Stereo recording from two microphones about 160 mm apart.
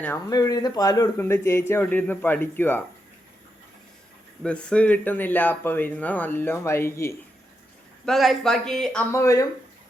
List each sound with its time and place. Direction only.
0.3 s speech: 20° left (ahead or behind)
4.4 s speech: 10° left (ahead or behind)
8.0 s speech: centre (ahead or behind)
9.1 s speech: 20° left (ahead or behind)